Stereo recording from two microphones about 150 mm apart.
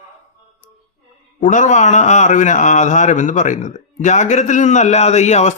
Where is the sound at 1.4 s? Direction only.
55° left (ahead or behind).